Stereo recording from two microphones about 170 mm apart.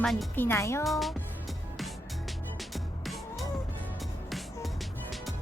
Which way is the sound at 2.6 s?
Centre (ahead or behind).